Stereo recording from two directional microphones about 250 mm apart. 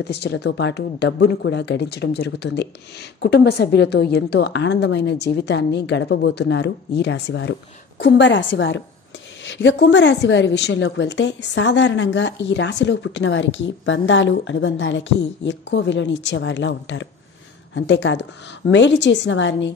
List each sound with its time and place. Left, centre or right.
0.0 s a woman's voice: left